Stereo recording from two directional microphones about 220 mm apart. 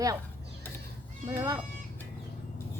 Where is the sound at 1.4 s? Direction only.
15° right (ahead or behind).